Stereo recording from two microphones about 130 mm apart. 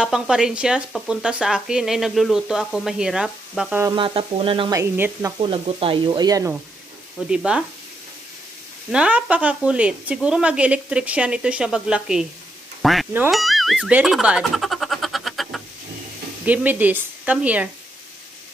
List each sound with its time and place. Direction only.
0.0 s speech: 5° right (ahead or behind)
3.9 s speech: 40° right (ahead or behind)
4.6 s speech: 20° right (ahead or behind)
5.4 s speech: 45° right (ahead or behind)
6.2 s speech: 25° right (ahead or behind)
7.2 s speech: 5° right (ahead or behind)
8.9 s speech: 10° right (ahead or behind)
12.8 s music: centre (ahead or behind)
13.3 s speech: centre (ahead or behind)
13.9 s a sound: 5° right (ahead or behind)
16.4 s speech: 15° right (ahead or behind)